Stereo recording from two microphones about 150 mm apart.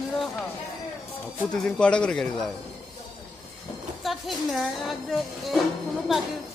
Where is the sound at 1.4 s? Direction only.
5° left (ahead or behind).